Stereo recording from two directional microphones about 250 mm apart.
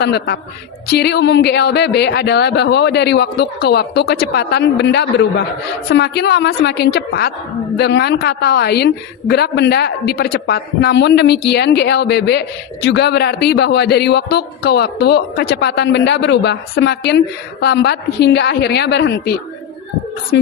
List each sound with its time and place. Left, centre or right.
0.0 s a woman's voice: left